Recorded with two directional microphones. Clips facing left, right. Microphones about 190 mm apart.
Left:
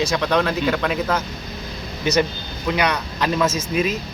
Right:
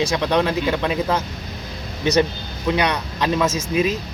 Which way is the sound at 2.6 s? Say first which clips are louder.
Right 1 dB; 25° right (ahead or behind).